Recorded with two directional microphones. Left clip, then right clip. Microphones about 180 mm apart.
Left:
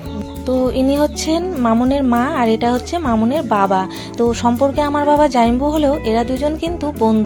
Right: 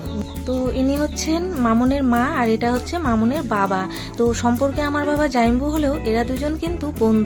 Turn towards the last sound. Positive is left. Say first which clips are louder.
# left 3 dB
turn(degrees=0)  # may be behind; listen again after turning